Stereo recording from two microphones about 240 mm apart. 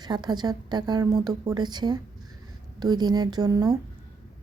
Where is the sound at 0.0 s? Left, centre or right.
Centre.